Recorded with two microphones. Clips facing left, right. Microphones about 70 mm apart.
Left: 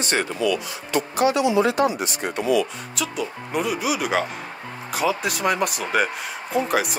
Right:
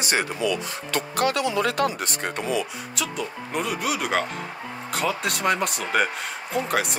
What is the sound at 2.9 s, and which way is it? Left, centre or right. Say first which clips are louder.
Speech: left 2 dB; centre.